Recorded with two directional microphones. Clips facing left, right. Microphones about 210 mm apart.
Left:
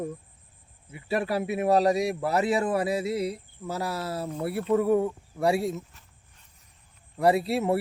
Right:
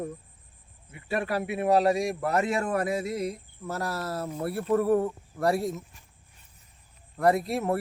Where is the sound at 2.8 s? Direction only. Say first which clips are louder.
Left 2 dB; 30° left (ahead or behind).